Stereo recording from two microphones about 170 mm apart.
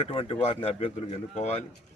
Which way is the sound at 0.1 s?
35° left (ahead or behind).